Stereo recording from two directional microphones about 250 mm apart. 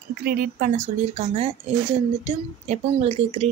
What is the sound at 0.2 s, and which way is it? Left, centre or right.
A woman's voice, right.